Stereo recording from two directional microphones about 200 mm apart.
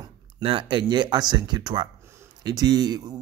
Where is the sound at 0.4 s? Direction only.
25° right (ahead or behind).